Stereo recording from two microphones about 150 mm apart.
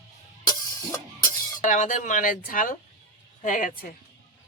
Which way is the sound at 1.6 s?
55° left (ahead or behind).